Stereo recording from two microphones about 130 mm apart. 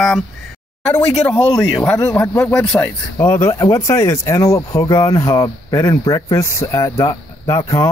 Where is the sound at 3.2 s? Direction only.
20° left (ahead or behind).